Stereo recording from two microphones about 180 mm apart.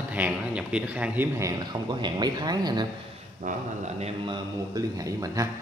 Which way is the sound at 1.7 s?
25° right (ahead or behind).